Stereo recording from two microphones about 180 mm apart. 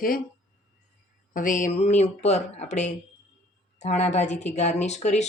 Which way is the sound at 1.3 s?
45° left (ahead or behind).